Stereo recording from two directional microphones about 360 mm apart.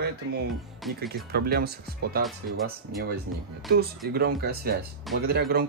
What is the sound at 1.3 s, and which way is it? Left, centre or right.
Speech, right.